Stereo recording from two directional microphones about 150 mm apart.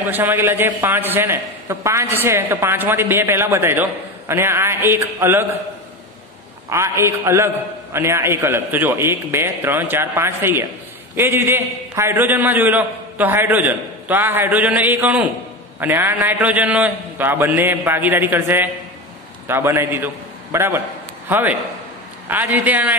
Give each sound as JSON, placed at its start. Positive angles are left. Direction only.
{"t": 0.1, "sound": "a man's voice", "side_deg": -15}
{"t": 6.7, "sound": "a man's voice", "side_deg": -20}